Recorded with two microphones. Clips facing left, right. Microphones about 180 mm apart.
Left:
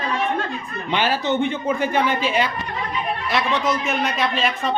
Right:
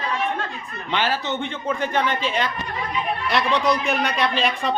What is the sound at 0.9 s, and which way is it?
A man's voice, 15° left (ahead or behind).